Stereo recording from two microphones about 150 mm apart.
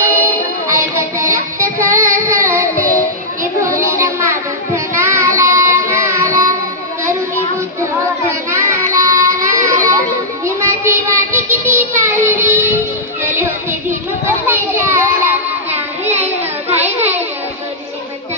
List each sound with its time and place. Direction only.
0.7 s child singing: 20° right (ahead or behind)
4.7 s child singing: 20° right (ahead or behind)
7.8 s child singing: 20° right (ahead or behind)
13.2 s music: 15° right (ahead or behind)
15.7 s child singing: 45° right (ahead or behind)
16.6 s a sound: 45° right (ahead or behind)